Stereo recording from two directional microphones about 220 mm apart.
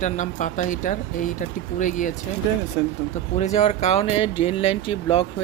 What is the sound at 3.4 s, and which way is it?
Speech, 30° left (ahead or behind).